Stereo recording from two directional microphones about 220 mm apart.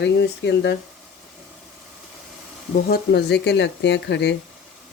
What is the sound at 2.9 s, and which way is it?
A woman's voice, 45° left (ahead or behind).